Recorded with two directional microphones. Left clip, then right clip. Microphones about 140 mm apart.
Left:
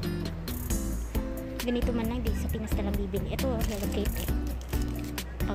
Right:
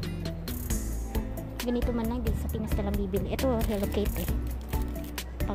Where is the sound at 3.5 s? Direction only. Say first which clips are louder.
Right 3 dB; 30° right (ahead or behind).